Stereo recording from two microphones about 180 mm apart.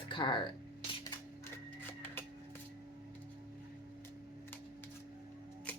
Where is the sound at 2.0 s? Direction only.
10° left (ahead or behind).